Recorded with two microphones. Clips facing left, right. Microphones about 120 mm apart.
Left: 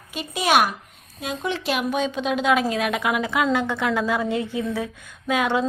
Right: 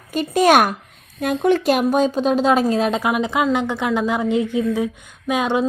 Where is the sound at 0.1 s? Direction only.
45° right (ahead or behind).